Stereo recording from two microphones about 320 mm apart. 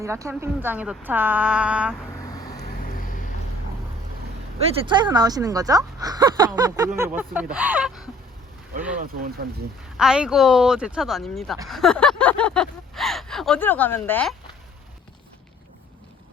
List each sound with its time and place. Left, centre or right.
0.0 s a woman's voice: centre
2.2 s vehicle: centre
2.8 s vehicle: left
4.9 s a woman's voice: centre
9.0 s speech: right
10.0 s a woman's voice: centre